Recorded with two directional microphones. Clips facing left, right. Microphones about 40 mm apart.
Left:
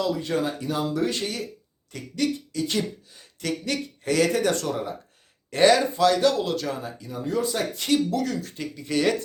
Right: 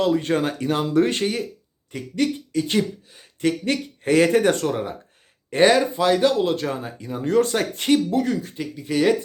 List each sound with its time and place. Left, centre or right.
0.0 s speech: right
1.9 s speech: right
7.3 s speech: right
8.5 s speech: centre